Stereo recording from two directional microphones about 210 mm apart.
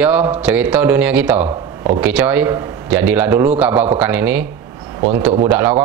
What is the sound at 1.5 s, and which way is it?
Speech, 25° right (ahead or behind).